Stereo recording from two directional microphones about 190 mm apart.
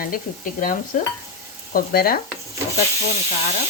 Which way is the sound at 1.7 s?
55° left (ahead or behind).